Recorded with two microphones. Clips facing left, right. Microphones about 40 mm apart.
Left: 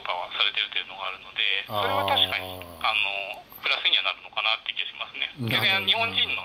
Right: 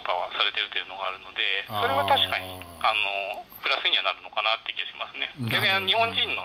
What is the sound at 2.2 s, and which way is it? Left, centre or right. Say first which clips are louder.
Speech: left 1 dB; centre.